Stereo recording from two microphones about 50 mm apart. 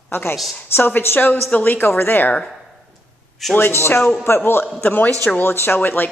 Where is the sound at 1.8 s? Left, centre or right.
Left.